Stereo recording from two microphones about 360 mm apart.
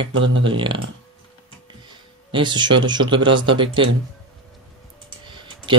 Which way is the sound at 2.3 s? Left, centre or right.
Centre.